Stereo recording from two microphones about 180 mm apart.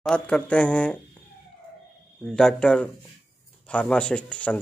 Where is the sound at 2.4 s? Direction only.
5° left (ahead or behind).